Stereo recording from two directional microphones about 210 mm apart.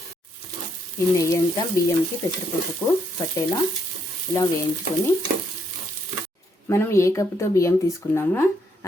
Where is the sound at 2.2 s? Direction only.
15° left (ahead or behind).